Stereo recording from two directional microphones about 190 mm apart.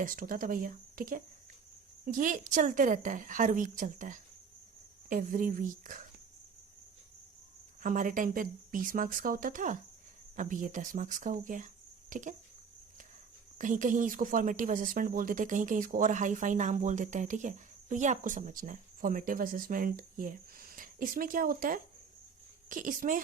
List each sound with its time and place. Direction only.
0.0 s speech: 50° right (ahead or behind)
7.8 s speech: 45° right (ahead or behind)
13.6 s speech: 45° right (ahead or behind)